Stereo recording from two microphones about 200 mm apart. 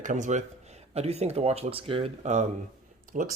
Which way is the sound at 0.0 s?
40° right (ahead or behind).